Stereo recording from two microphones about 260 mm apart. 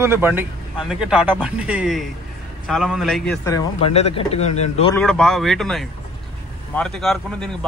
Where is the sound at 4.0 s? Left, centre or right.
Left.